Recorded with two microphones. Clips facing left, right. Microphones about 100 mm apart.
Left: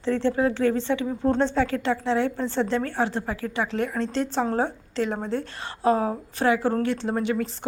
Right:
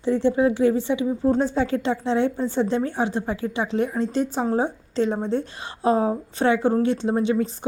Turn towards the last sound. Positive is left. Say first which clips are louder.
# right 4 dB
turn(degrees=-20)  # may be behind; listen again after turning